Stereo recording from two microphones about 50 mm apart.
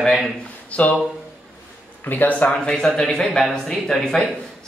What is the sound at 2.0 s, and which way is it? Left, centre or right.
Speech, left.